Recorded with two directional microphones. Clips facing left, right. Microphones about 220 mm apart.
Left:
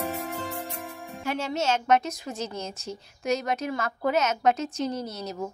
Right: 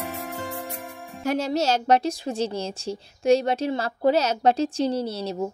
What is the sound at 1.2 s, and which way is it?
A woman's voice, 40° right (ahead or behind).